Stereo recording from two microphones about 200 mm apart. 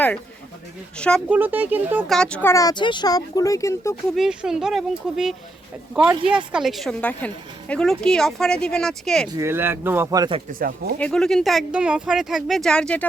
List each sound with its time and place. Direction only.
0.9 s speech: 5° left (ahead or behind)
1.3 s speech: 10° right (ahead or behind)
2.1 s speech: 5° left (ahead or behind)
4.1 s speech: centre (ahead or behind)
9.3 s speech: 15° right (ahead or behind)
10.5 s speech: 45° right (ahead or behind)
11.0 s speech: 5° left (ahead or behind)